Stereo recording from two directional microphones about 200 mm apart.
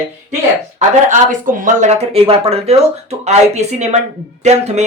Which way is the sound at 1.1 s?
40° right (ahead or behind).